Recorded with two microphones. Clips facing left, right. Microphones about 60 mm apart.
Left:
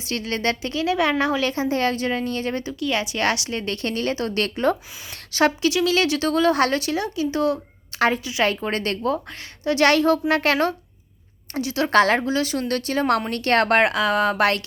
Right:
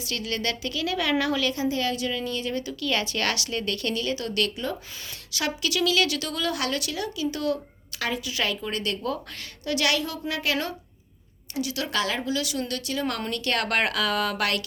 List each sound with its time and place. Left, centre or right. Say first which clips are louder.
0.0 s speech: left 5 dB; left
2.7 s speech: left 2 dB; left
8.0 s speech: left 8 dB; left
9.8 s a woman's voice: left 11 dB; left
11.5 s speech: left 6 dB; left
11.9 s speech: left 13 dB; left